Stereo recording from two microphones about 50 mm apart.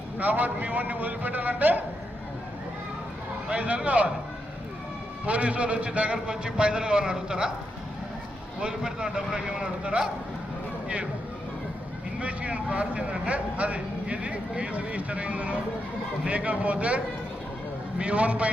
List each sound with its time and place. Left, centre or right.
0.2 s a man's voice: right
3.5 s speech: right
5.2 s a man's voice: right
8.6 s speech: centre
12.2 s speech: right